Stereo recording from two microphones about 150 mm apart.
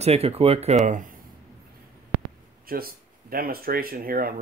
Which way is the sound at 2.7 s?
80° right.